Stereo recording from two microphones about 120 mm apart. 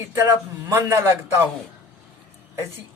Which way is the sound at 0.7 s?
20° right (ahead or behind).